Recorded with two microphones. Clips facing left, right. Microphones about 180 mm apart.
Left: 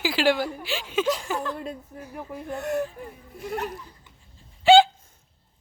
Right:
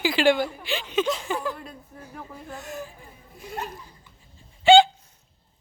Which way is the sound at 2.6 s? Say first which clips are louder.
Left 12 dB; 65° left (ahead or behind).